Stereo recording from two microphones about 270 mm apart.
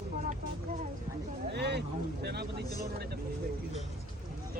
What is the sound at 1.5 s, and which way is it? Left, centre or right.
Speech, right.